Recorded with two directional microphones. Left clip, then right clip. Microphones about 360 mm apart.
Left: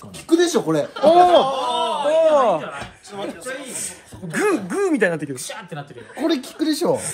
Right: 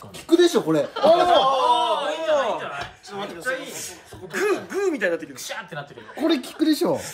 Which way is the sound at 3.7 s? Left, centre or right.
Centre.